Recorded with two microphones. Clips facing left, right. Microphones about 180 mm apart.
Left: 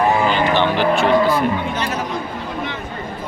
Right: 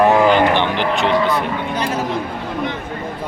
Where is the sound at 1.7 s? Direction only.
10° right (ahead or behind).